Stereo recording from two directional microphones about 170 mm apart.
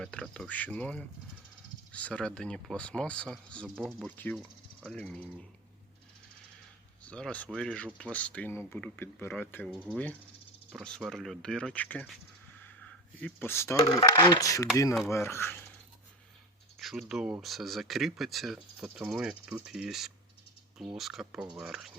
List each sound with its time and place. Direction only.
0.0 s speech: 5° left (ahead or behind)
7.0 s speech: 5° left (ahead or behind)
13.2 s speech: 15° left (ahead or behind)
16.8 s speech: centre (ahead or behind)